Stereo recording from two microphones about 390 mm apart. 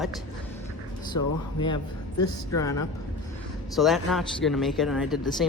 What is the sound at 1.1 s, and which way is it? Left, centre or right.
Speech, left.